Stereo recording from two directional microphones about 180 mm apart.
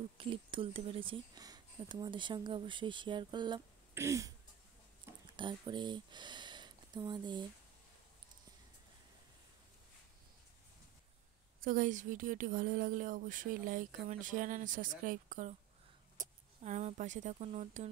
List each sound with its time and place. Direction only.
0.2 s speech: 30° right (ahead or behind)
3.9 s throat clearing: 15° right (ahead or behind)
5.3 s speech: 25° right (ahead or behind)
11.6 s speech: 50° right (ahead or behind)